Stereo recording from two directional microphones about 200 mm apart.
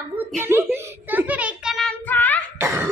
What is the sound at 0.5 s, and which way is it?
Child singing, 10° right (ahead or behind).